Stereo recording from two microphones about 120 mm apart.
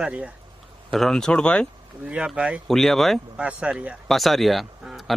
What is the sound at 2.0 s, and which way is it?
Speech, 10° right (ahead or behind).